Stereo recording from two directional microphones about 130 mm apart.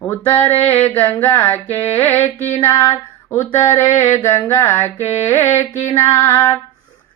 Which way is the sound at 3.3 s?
20° left (ahead or behind).